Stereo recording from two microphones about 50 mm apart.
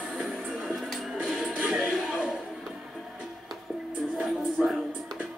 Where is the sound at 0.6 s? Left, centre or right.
Centre.